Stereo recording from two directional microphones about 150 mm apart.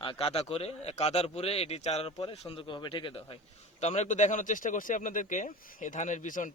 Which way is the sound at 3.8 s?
50° left (ahead or behind).